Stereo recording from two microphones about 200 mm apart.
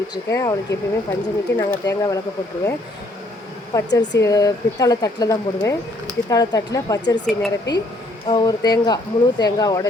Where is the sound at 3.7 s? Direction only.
20° left (ahead or behind).